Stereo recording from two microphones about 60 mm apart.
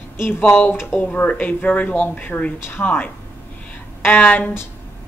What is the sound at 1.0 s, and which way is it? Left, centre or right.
A woman's voice, left.